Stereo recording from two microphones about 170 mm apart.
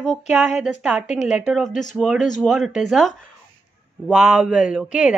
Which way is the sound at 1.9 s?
Centre (ahead or behind).